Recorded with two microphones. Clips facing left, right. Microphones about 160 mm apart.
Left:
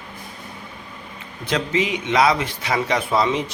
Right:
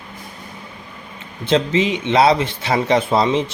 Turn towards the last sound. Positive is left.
turn(degrees=-25)  # may be behind; listen again after turning